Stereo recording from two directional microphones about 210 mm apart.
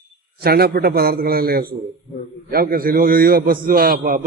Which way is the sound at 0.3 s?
45° right (ahead or behind).